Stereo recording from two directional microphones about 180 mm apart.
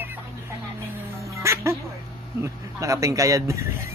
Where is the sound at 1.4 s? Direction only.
15° right (ahead or behind).